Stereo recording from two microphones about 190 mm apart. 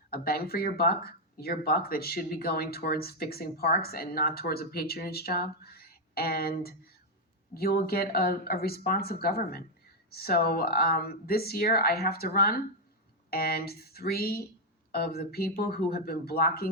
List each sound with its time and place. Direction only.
0.1 s speech: 55° left (ahead or behind)